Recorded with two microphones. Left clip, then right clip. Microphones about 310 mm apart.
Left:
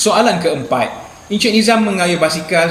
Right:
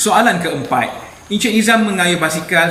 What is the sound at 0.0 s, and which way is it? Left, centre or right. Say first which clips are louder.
Speech: even; centre.